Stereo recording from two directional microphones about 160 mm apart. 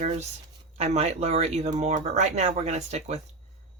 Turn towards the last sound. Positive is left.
turn(degrees=-45)  # may be behind; listen again after turning